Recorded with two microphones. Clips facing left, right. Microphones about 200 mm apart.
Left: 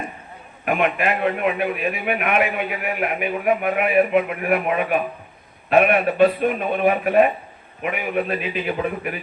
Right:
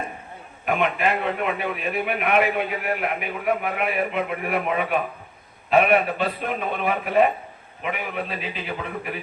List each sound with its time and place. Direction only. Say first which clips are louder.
0.6 s a man's voice: left 2 dB; 60° left (ahead or behind)